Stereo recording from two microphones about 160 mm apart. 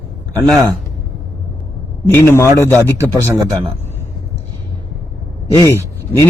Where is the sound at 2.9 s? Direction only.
15° right (ahead or behind).